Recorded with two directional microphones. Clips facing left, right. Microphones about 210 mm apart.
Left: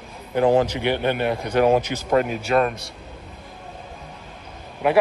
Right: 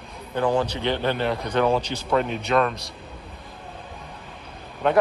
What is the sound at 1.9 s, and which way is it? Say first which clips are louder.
Speech: left 3 dB; 65° left (ahead or behind).